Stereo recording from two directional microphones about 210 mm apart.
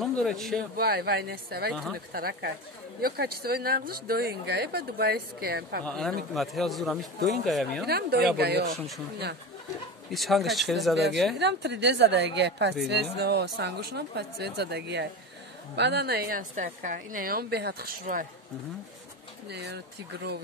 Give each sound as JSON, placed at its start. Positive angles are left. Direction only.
{"t": 0.0, "sound": "speech", "side_deg": 0}
{"t": 0.7, "sound": "speech", "side_deg": -45}
{"t": 1.7, "sound": "speech", "side_deg": 0}
{"t": 2.1, "sound": "speech", "side_deg": -45}
{"t": 5.9, "sound": "speech", "side_deg": 0}
{"t": 7.8, "sound": "speech", "side_deg": -50}
{"t": 8.7, "sound": "speech", "side_deg": 0}
{"t": 10.1, "sound": "speech", "side_deg": 0}
{"t": 11.3, "sound": "a woman's voice", "side_deg": -55}
{"t": 19.5, "sound": "speech", "side_deg": -55}